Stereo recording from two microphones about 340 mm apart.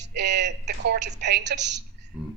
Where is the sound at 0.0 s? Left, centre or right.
Right.